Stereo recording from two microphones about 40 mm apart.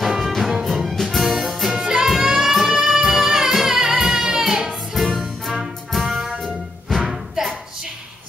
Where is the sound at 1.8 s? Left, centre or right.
Centre.